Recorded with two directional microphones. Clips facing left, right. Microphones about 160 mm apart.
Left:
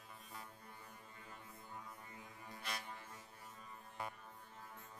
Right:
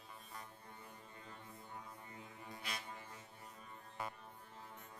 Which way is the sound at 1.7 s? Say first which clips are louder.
Even; 25° right (ahead or behind).